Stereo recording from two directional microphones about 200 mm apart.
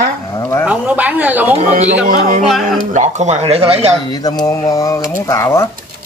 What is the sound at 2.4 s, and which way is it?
Speech, centre (ahead or behind).